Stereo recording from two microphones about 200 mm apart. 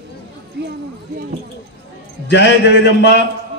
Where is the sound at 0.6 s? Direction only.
55° right (ahead or behind).